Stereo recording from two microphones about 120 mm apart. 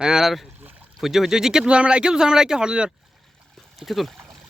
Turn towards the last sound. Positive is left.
turn(degrees=0)  # may be behind; listen again after turning